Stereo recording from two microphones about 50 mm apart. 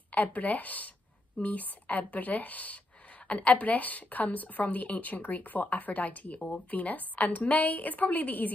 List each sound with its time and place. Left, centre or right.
0.1 s a woman's voice: left